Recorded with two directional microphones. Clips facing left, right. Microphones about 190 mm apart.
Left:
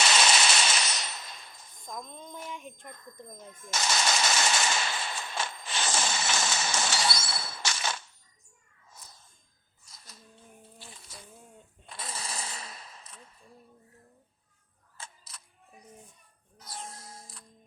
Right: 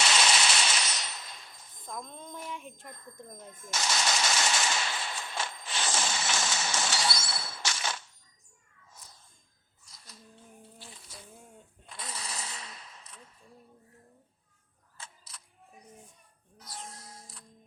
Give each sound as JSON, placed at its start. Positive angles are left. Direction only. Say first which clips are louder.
{"t": 0.0, "sound": "machine gun", "louder": "left 2 dB", "side_deg": 45}
{"t": 1.8, "sound": "speech", "louder": "even", "side_deg": 0}
{"t": 3.7, "sound": "machine gun", "louder": "left 2 dB", "side_deg": 50}
{"t": 12.0, "sound": "a sound", "louder": "left 2 dB", "side_deg": 30}
{"t": 16.6, "sound": "music", "louder": "left 2 dB", "side_deg": 25}
{"t": 16.8, "sound": "music", "louder": "left 2 dB", "side_deg": 50}